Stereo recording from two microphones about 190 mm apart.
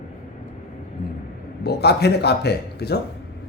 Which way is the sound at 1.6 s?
60° left (ahead or behind).